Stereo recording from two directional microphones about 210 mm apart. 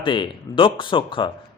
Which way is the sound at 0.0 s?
25° left (ahead or behind).